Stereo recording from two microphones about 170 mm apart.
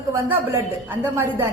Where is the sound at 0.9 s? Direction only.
15° right (ahead or behind).